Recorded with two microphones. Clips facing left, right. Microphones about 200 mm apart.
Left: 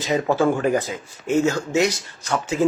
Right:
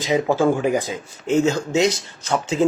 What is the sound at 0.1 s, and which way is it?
Speech, 10° right (ahead or behind).